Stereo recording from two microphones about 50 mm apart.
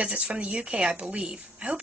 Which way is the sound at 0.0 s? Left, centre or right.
Right.